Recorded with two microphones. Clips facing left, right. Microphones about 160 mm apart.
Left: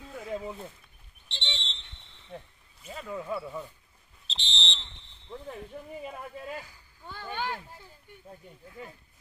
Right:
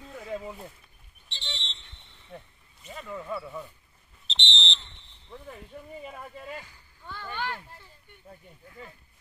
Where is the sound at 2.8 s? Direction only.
Centre (ahead or behind).